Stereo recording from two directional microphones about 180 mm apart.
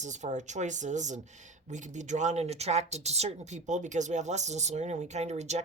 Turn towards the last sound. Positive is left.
turn(degrees=-40)  # may be behind; listen again after turning